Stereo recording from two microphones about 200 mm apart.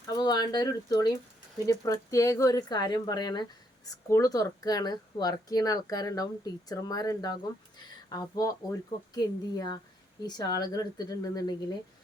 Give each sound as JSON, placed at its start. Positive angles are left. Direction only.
{"t": 0.2, "sound": "a woman's voice", "side_deg": 20}